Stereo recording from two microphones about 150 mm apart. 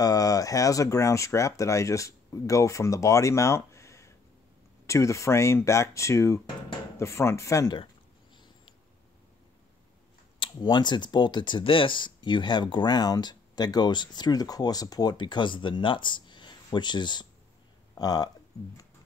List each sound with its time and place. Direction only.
0.0 s speech: 25° left (ahead or behind)
10.4 s speech: 30° left (ahead or behind)